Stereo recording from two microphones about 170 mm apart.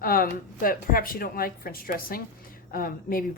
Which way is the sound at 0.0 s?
60° left (ahead or behind).